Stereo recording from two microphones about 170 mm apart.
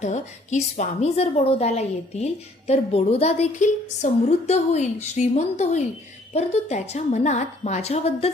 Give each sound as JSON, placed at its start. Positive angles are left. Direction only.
{"t": 0.0, "sound": "a woman's voice", "side_deg": 45}